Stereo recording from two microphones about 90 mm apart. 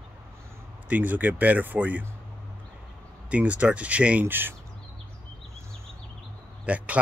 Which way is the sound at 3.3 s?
15° right (ahead or behind).